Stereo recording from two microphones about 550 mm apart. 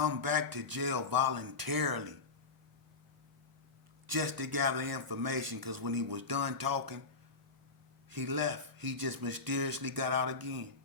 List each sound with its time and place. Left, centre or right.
0.0 s a man's voice: right
4.0 s a man's voice: right
8.1 s a man's voice: right